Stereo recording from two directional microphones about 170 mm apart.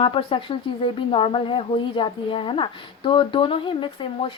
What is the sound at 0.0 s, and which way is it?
Speech, 30° left (ahead or behind).